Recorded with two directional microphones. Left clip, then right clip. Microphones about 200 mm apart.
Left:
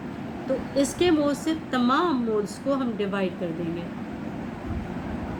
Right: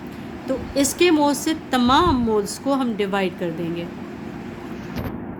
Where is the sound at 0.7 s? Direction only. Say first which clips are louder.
Right 5 dB; 50° right (ahead or behind).